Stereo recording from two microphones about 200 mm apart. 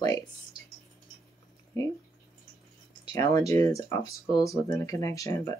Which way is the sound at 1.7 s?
15° left (ahead or behind).